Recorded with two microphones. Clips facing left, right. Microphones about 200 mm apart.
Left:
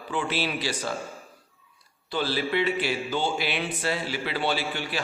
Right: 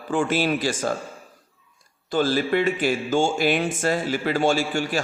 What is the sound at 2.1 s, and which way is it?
Speech, 45° right (ahead or behind).